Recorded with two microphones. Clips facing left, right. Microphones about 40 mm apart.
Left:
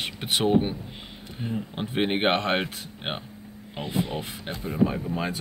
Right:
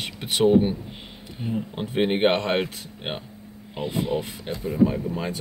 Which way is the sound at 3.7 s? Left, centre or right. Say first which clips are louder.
Right 3 dB; centre.